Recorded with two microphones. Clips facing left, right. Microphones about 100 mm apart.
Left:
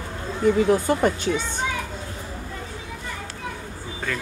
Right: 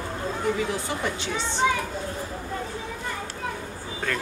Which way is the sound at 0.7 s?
50° left (ahead or behind).